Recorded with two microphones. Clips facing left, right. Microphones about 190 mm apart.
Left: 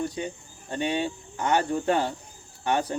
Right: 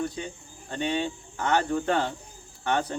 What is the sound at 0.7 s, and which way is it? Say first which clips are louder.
Speech: left 1 dB; 10° left (ahead or behind).